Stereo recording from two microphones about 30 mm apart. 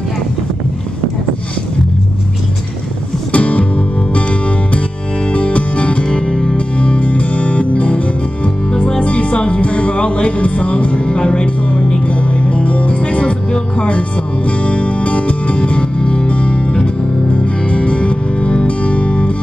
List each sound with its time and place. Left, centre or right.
3.3 s music: left
6.1 s music: left
6.5 s music: left
12.1 s music: left